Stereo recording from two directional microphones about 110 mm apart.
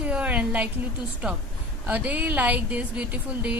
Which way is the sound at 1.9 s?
15° right (ahead or behind).